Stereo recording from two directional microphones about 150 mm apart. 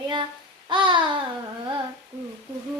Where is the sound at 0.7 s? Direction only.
30° right (ahead or behind).